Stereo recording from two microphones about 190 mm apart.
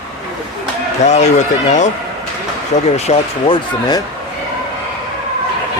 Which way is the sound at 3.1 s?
25° left (ahead or behind).